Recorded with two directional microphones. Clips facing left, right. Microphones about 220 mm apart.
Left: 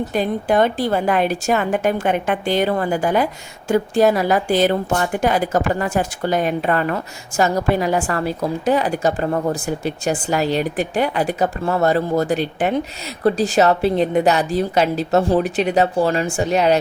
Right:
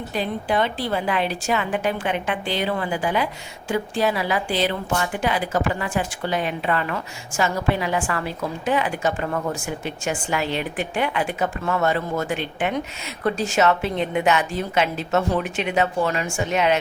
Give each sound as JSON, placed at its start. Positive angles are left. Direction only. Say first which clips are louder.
{"t": 0.1, "sound": "a woman's voice", "louder": "left 3 dB", "side_deg": 45}